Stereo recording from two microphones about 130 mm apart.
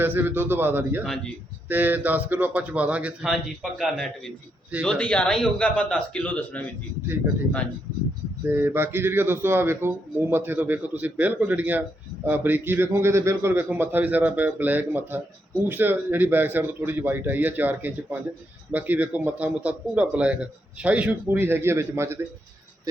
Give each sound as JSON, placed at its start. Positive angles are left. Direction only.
{"t": 0.0, "sound": "speech", "side_deg": -15}
{"t": 1.0, "sound": "speech", "side_deg": 5}
{"t": 1.6, "sound": "a man's voice", "side_deg": -15}
{"t": 8.4, "sound": "speech", "side_deg": -15}